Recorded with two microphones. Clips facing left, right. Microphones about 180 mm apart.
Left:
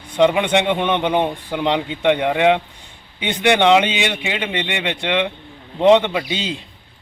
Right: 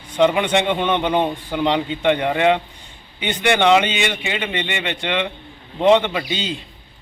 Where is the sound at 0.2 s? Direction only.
10° left (ahead or behind).